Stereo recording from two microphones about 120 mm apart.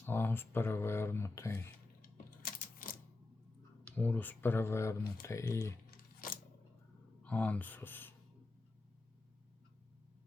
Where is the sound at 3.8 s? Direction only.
15° left (ahead or behind).